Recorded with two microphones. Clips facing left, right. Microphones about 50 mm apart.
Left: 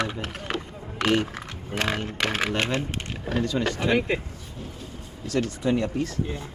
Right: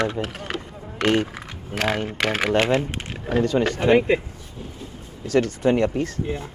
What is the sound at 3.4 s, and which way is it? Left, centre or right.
Speech, right.